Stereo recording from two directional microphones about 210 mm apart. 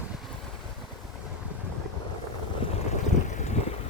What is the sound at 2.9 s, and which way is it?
Vehicle, 35° left (ahead or behind).